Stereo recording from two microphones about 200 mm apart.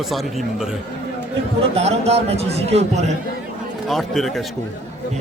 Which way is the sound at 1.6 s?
30° right (ahead or behind).